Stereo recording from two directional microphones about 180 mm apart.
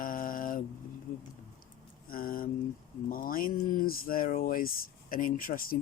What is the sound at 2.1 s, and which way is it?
Speech, 55° left (ahead or behind).